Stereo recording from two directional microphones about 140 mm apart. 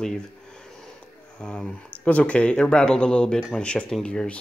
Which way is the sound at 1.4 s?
5° left (ahead or behind).